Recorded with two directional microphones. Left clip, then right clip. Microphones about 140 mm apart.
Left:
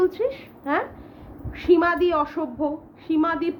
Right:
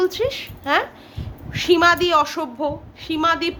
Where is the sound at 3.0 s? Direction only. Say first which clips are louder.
Right 3 dB; 10° right (ahead or behind).